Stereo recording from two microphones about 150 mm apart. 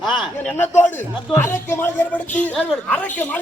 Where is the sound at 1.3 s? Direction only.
15° left (ahead or behind).